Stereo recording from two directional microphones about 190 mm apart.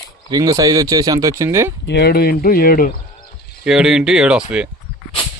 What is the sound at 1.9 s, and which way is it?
Speech, 60° left (ahead or behind).